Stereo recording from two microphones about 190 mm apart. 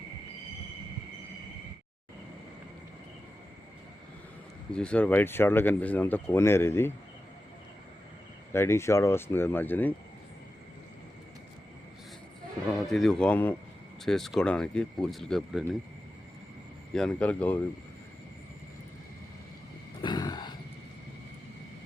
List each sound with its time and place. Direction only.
4.7 s speech: 5° left (ahead or behind)
8.5 s speech: 15° left (ahead or behind)
12.9 s speech: centre (ahead or behind)
16.9 s speech: 5° left (ahead or behind)
20.0 s a sound: 20° left (ahead or behind)